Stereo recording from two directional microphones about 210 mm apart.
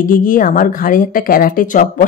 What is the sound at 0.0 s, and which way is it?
A woman's voice, 40° left (ahead or behind).